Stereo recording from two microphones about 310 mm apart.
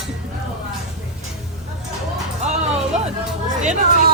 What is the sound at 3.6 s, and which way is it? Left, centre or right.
Speech, right.